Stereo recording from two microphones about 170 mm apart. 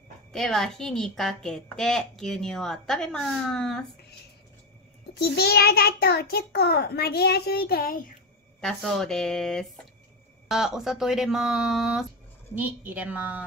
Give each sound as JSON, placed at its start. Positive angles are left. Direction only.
{"t": 0.3, "sound": "a woman's voice", "side_deg": 0}
{"t": 5.2, "sound": "a child's voice", "side_deg": 65}
{"t": 8.5, "sound": "a woman's voice", "side_deg": 5}